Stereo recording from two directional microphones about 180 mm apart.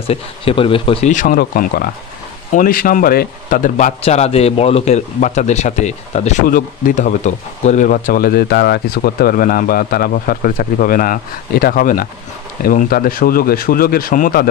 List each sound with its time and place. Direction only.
0.1 s speech: 30° left (ahead or behind)
1.1 s speech: 50° left (ahead or behind)
6.4 s speech: 50° left (ahead or behind)